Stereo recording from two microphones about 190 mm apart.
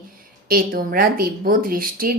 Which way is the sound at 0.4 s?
50° right (ahead or behind).